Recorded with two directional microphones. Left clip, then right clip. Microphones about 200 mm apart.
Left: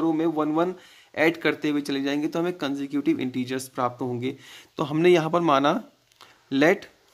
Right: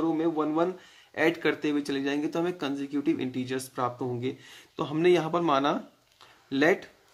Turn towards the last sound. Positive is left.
turn(degrees=40)  # may be behind; listen again after turning